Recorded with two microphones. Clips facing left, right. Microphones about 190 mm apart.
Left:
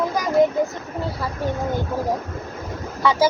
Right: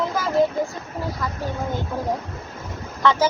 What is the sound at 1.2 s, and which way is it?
Speech, 30° left (ahead or behind).